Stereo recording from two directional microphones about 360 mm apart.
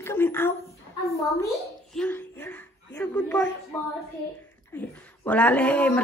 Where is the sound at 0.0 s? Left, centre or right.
Centre.